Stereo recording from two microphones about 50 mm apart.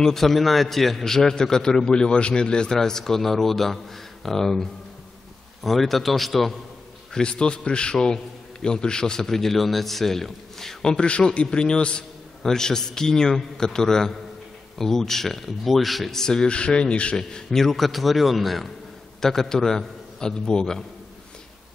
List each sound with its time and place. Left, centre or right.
0.0 s a man's voice: centre
7.2 s a man's voice: centre
17.2 s a man's voice: centre